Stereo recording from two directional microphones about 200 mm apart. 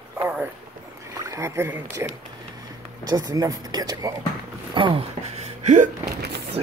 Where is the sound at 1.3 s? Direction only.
15° right (ahead or behind).